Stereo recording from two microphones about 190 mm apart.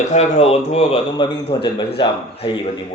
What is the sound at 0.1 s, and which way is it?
Speech, 35° left (ahead or behind).